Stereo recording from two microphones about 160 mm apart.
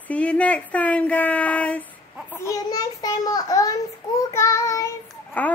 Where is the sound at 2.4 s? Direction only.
20° left (ahead or behind).